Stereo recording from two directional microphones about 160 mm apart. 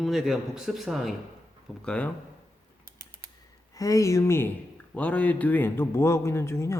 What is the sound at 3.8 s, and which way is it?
Speech, 20° left (ahead or behind).